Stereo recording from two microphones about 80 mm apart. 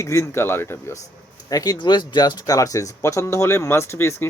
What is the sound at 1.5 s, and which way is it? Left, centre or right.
Speech, left.